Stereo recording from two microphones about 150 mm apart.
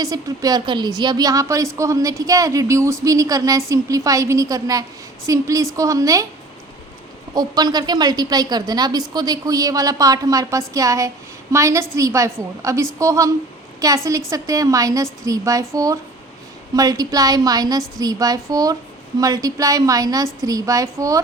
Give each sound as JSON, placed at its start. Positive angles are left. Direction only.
{"t": 0.0, "sound": "a woman's voice", "side_deg": -25}
{"t": 7.3, "sound": "a woman's voice", "side_deg": -25}